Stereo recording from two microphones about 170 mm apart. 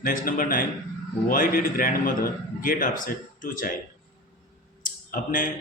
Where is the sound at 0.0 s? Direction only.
55° left (ahead or behind).